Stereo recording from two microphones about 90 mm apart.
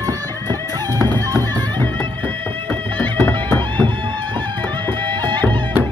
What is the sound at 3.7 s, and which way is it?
Music, 65° right (ahead or behind).